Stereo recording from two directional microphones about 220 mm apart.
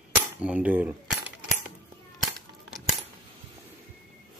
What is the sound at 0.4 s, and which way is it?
Speech, 5° right (ahead or behind).